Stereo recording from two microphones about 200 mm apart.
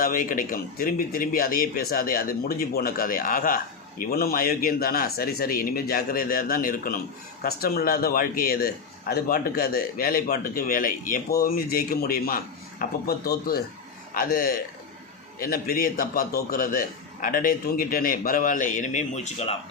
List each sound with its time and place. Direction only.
0.0 s speech: 45° left (ahead or behind)